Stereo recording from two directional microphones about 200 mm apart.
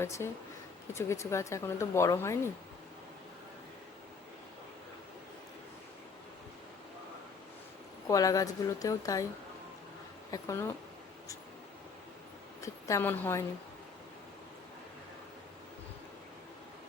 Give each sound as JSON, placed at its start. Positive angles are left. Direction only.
{"t": 0.0, "sound": "speech", "side_deg": 15}
{"t": 8.0, "sound": "speech", "side_deg": 15}
{"t": 10.3, "sound": "speech", "side_deg": 15}
{"t": 12.6, "sound": "a woman's voice", "side_deg": 10}